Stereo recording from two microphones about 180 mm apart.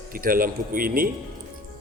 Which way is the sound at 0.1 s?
50° right (ahead or behind).